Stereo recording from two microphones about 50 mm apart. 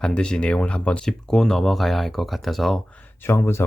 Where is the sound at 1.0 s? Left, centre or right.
Centre.